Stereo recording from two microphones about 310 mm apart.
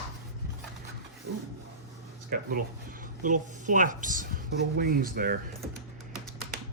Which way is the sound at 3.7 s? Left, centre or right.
Right.